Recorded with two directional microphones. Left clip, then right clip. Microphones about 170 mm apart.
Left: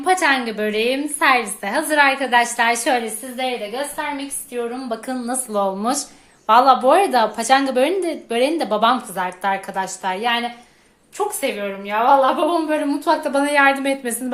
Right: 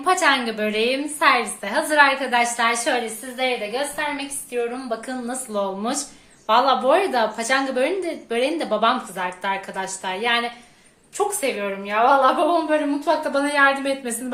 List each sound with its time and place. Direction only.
0.0 s a woman's voice: 30° left (ahead or behind)
3.7 s a woman's voice: 20° left (ahead or behind)
4.5 s a woman's voice: 35° left (ahead or behind)